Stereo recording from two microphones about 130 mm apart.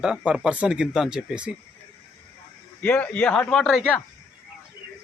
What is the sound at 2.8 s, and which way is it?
Speech, 10° left (ahead or behind).